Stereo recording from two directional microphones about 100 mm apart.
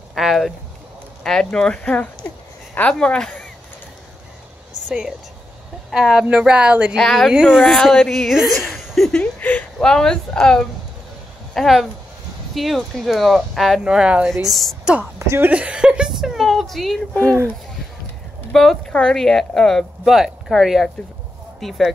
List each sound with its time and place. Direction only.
0.1 s a woman's voice: centre (ahead or behind)
4.8 s a woman's voice: 10° right (ahead or behind)
7.0 s speech: 5° left (ahead or behind)
9.2 s a woman's voice: 15° left (ahead or behind)
15.1 s speech: 25° right (ahead or behind)
15.5 s a woman's voice: 10° right (ahead or behind)
17.2 s speech: 25° right (ahead or behind)
18.5 s speech: 5° left (ahead or behind)